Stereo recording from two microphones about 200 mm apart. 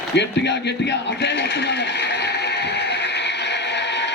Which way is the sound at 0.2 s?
60° left (ahead or behind).